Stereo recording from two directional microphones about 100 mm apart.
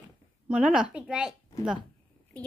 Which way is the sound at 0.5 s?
5° right (ahead or behind).